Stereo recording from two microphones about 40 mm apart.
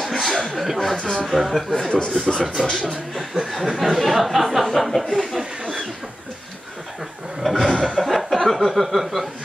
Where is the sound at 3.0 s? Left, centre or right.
Centre.